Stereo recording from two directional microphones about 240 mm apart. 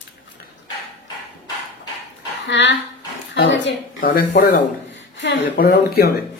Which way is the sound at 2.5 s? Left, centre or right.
Left.